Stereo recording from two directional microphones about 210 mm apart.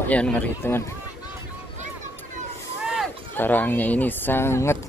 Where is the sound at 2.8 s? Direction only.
5° right (ahead or behind).